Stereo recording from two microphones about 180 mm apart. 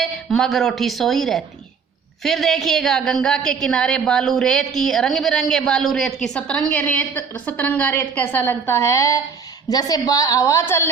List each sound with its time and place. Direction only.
0.0 s a woman's voice: centre (ahead or behind)